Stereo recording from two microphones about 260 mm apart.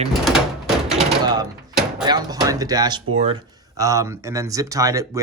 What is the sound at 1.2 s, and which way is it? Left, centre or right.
Speech, centre.